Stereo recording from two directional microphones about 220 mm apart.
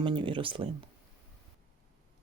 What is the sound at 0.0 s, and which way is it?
Speech, 20° right (ahead or behind).